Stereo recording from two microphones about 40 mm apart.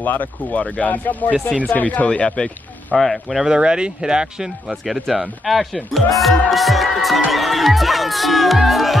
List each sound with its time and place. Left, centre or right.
0.0 s speech: left
3.0 s speech: centre
3.4 s speech: right
4.8 s speech: centre